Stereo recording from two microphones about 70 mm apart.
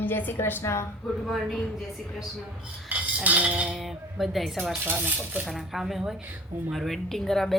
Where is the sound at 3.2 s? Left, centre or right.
Right.